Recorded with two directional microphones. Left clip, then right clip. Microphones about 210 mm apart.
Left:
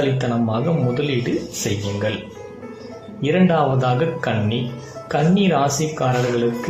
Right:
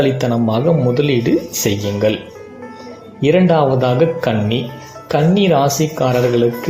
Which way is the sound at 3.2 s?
20° right (ahead or behind).